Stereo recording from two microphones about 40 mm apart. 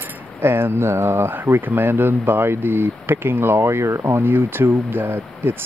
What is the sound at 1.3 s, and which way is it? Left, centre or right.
Speech, right.